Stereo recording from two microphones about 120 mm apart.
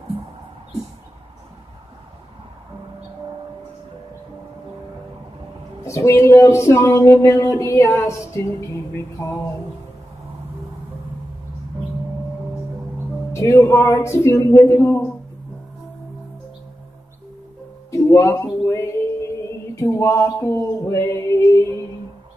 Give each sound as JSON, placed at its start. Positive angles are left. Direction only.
{"t": 5.9, "sound": "speech", "side_deg": 25}
{"t": 13.3, "sound": "music", "side_deg": 25}
{"t": 13.6, "sound": "speech", "side_deg": 25}
{"t": 17.9, "sound": "a sound", "side_deg": 25}